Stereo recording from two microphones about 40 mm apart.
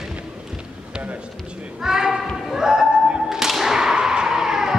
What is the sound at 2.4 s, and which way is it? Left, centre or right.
Music, centre.